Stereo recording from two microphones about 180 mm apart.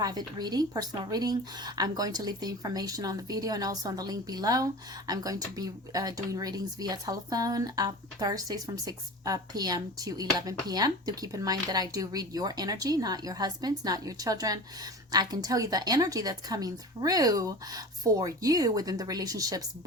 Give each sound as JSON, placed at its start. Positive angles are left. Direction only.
{"t": 0.0, "sound": "a woman's voice", "side_deg": -20}